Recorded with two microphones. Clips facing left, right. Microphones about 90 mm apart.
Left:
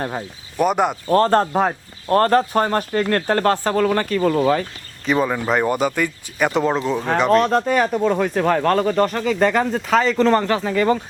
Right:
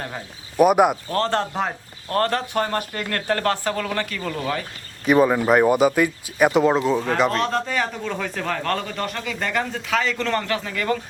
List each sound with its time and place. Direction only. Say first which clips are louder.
0.5 s speech: right 3 dB; 10° right (ahead or behind)
1.1 s speech: left 7 dB; 40° left (ahead or behind)
5.0 s speech: right 3 dB; 10° right (ahead or behind)
7.3 s speech: left 7 dB; 45° left (ahead or behind)